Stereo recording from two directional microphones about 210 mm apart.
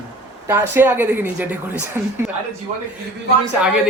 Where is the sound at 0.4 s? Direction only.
10° right (ahead or behind).